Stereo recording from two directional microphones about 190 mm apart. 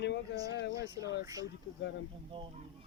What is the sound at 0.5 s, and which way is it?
Speech, 65° left (ahead or behind).